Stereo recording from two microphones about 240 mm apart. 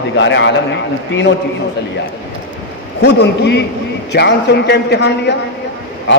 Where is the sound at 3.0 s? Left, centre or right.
Left.